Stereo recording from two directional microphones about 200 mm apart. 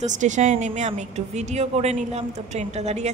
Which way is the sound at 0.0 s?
40° right (ahead or behind).